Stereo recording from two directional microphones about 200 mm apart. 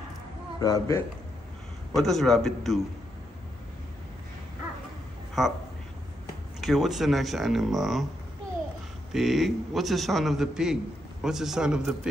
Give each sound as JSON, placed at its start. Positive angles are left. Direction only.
{"t": 0.6, "sound": "a man's voice", "side_deg": 15}
{"t": 2.0, "sound": "a man's voice", "side_deg": 0}
{"t": 5.4, "sound": "a man's voice", "side_deg": 0}
{"t": 6.6, "sound": "a man's voice", "side_deg": 0}
{"t": 9.1, "sound": "a man's voice", "side_deg": 0}